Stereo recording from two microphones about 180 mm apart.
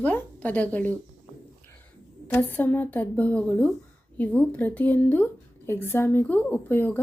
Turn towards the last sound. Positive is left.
turn(degrees=10)  # may be behind; listen again after turning